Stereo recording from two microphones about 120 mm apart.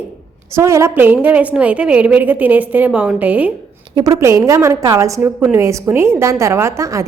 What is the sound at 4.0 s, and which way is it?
A woman's voice, 30° right (ahead or behind).